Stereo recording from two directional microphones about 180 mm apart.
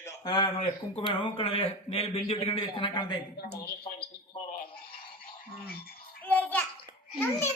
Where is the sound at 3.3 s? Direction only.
65° left (ahead or behind).